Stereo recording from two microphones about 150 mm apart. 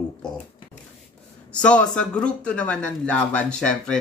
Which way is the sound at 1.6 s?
5° left (ahead or behind).